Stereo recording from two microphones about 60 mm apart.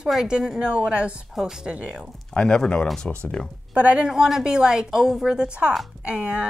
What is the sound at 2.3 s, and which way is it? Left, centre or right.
Speech, centre.